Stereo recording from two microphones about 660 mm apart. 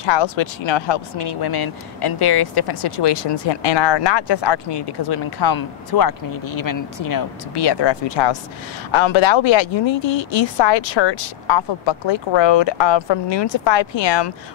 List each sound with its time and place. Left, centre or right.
0.0 s speech: left